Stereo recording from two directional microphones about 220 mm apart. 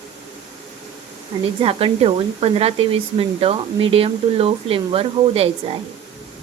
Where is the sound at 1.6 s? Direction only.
25° right (ahead or behind).